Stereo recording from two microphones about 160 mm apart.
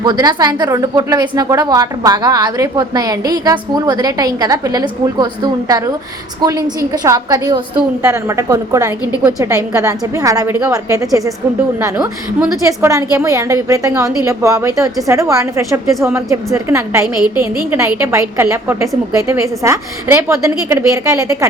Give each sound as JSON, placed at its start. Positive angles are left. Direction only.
{"t": 0.0, "sound": "a woman's voice", "side_deg": -25}